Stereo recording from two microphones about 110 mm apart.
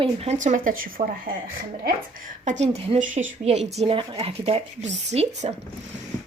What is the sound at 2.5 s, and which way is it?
Speech, 80° right.